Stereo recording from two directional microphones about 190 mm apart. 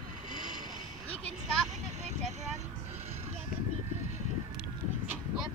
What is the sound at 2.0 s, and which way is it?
Vehicle, 40° right (ahead or behind).